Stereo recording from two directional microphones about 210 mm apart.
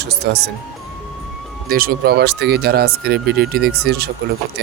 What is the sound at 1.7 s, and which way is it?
Speech, 45° right (ahead or behind).